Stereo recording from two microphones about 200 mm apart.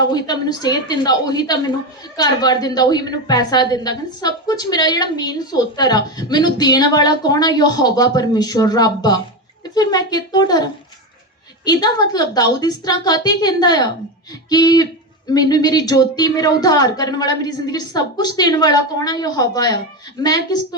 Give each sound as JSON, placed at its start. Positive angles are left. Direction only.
{"t": 0.0, "sound": "a woman's voice", "side_deg": 20}